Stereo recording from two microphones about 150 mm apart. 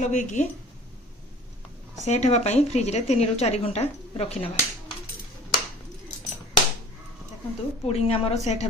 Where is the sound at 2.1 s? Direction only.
45° left (ahead or behind).